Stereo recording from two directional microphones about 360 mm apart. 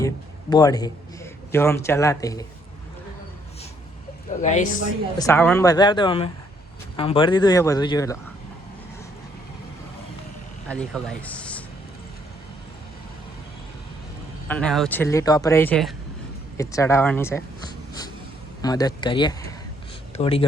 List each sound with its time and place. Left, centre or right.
0.5 s a man's voice: centre
4.3 s speech: centre
5.2 s speech: centre
10.7 s speech: centre
14.4 s speech: centre